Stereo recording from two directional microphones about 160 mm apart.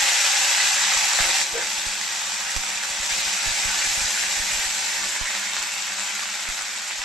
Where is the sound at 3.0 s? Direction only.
Centre (ahead or behind).